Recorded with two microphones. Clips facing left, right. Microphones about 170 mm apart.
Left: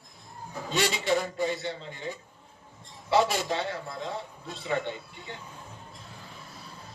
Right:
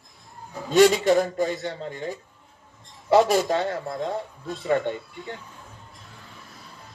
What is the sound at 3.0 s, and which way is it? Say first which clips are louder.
A man's voice: right 7 dB; 45° right (ahead or behind).